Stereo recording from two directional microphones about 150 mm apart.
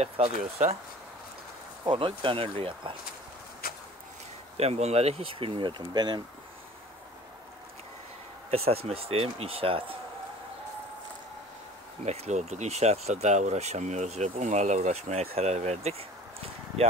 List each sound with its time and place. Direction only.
0.0 s speech: 50° right (ahead or behind)
1.9 s speech: 35° right (ahead or behind)
3.6 s a sound: 85° left
4.6 s speech: 45° right (ahead or behind); by 6.2 s 30° right (ahead or behind)
8.5 s speech: 40° right (ahead or behind)
12.0 s speech: 50° right (ahead or behind)